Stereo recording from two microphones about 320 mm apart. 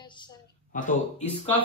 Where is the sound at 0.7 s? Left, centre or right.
Left.